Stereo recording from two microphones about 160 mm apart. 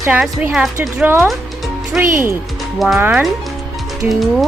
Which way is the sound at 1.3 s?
Centre (ahead or behind).